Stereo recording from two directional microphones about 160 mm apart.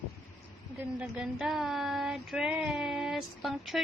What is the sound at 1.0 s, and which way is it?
Child singing, 5° right (ahead or behind).